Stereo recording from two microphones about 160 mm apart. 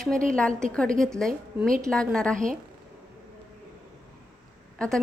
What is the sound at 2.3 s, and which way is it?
Speech, 55° right (ahead or behind).